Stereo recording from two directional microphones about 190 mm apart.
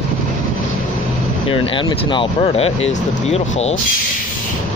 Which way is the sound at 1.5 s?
25° left (ahead or behind).